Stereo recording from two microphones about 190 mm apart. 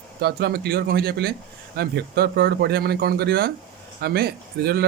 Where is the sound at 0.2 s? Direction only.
55° right (ahead or behind).